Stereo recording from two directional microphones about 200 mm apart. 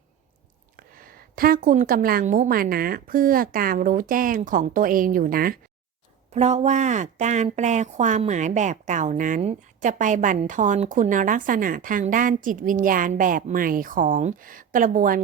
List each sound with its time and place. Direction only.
0.8 s a woman's voice: 45° right (ahead or behind)
6.3 s speech: 35° right (ahead or behind)